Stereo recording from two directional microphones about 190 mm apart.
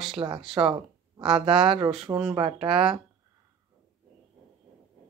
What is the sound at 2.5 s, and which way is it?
Speech, 5° right (ahead or behind).